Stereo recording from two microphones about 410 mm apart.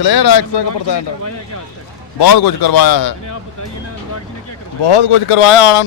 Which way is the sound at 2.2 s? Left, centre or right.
Left.